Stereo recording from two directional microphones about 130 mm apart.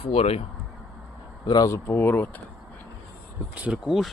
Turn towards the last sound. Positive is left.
turn(degrees=-5)  # may be behind; listen again after turning